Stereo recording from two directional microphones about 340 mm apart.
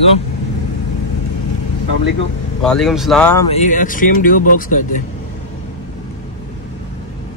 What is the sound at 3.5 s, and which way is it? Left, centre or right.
Speech, left.